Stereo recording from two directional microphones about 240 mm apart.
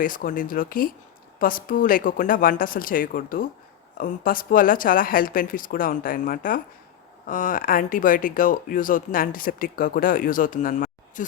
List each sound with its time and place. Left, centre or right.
0.0 s speech: left